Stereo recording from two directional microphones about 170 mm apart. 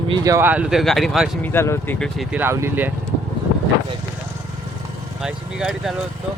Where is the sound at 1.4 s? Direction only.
15° left (ahead or behind).